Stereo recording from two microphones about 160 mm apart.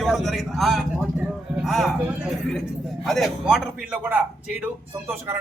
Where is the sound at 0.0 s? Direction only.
Centre (ahead or behind).